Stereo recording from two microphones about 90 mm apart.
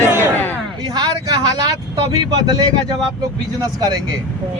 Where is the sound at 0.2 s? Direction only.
20° left (ahead or behind).